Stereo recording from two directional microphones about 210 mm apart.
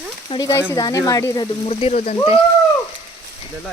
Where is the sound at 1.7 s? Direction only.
30° left (ahead or behind).